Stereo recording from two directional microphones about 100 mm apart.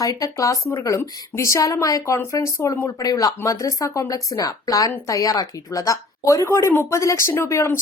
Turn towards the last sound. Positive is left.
turn(degrees=25)  # may be behind; listen again after turning